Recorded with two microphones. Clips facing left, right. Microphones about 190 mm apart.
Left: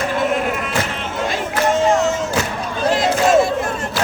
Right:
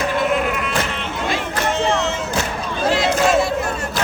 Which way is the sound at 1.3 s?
45° left (ahead or behind).